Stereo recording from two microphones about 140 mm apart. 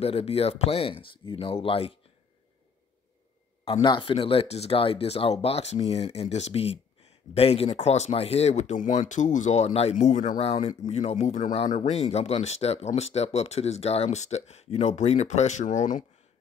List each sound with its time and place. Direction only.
0.0 s speech: 45° left (ahead or behind)
3.8 s speech: 35° left (ahead or behind); by 10.4 s 65° left (ahead or behind)
10.4 s speech: 50° left (ahead or behind); by 16.1 s 65° left (ahead or behind)